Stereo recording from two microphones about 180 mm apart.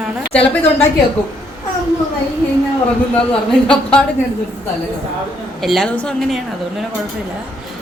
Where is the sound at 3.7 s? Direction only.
5° left (ahead or behind).